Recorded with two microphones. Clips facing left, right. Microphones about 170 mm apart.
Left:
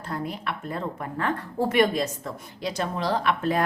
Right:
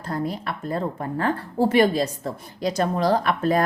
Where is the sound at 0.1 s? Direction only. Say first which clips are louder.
Right 4 dB; 35° right (ahead or behind).